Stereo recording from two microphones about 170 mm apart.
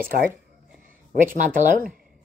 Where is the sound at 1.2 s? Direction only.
50° right (ahead or behind).